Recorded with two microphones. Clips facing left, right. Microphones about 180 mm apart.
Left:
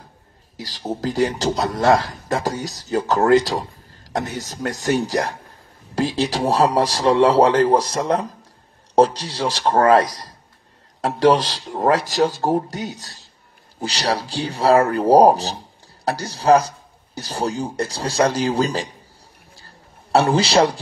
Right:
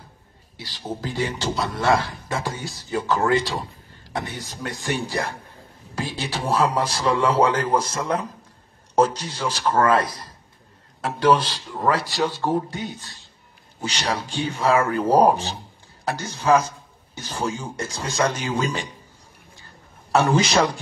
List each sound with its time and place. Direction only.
0.6 s a man's voice: 45° left (ahead or behind)
11.2 s a man's voice: 40° left (ahead or behind)
19.6 s a sound: 35° left (ahead or behind)